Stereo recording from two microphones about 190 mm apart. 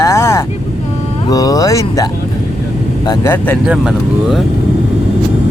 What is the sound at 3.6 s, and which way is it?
Speech, 5° right (ahead or behind).